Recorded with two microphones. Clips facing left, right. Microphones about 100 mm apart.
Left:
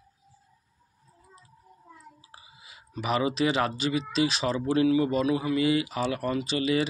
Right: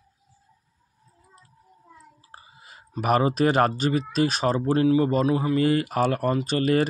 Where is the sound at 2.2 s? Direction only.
50° right (ahead or behind).